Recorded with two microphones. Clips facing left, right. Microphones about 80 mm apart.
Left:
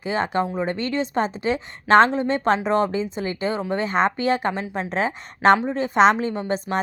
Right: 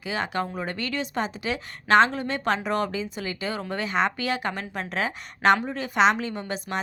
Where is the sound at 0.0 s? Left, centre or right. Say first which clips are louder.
Left 5 dB; left.